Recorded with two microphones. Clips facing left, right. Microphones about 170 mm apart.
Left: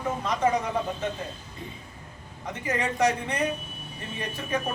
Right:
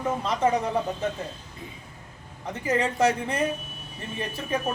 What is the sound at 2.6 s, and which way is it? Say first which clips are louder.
Speech: right 2 dB; 30° right (ahead or behind).